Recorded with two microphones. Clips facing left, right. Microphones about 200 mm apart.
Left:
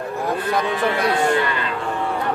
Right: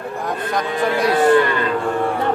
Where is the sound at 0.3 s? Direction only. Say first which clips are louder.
Left 1 dB; 10° left (ahead or behind).